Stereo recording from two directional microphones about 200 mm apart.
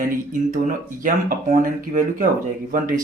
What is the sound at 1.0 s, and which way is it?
Speech, 45° right (ahead or behind).